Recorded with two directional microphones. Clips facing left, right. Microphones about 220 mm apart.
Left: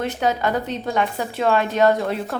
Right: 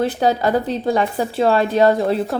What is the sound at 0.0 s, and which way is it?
A woman's voice, 35° right (ahead or behind).